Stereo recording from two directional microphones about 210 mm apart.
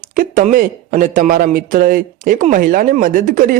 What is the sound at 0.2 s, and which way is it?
A man's voice, 40° right (ahead or behind).